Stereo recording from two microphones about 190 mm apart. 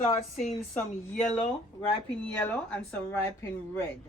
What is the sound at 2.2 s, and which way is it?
Speech, 10° left (ahead or behind).